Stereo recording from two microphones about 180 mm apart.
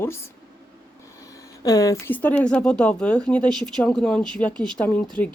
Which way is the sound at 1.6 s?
20° left (ahead or behind).